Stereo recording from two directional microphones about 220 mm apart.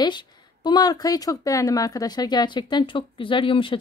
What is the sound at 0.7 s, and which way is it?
Speech, 20° left (ahead or behind).